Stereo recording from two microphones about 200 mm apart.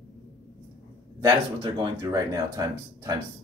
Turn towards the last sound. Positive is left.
turn(degrees=-20)  # may be behind; listen again after turning